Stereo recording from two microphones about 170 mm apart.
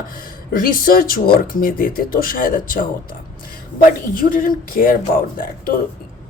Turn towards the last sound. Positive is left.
turn(degrees=55)  # may be behind; listen again after turning